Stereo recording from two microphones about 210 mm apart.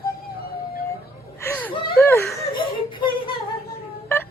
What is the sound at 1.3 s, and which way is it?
Whimper, 10° left (ahead or behind).